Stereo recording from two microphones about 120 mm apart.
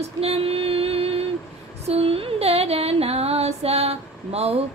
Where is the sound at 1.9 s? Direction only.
55° right (ahead or behind).